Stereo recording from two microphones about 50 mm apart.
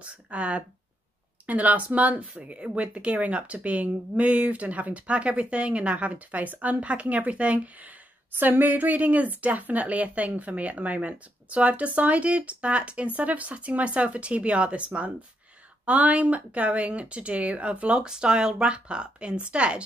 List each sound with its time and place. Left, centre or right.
0.0 s speech: right